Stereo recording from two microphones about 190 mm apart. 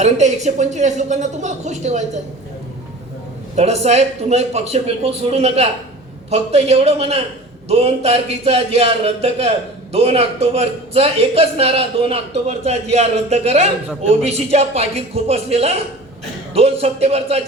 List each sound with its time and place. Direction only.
0.0 s a man's voice: 40° right (ahead or behind)
3.5 s a man's voice: 35° right (ahead or behind)